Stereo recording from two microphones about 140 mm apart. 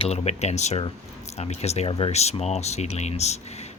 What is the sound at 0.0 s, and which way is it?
Speech, 50° left (ahead or behind).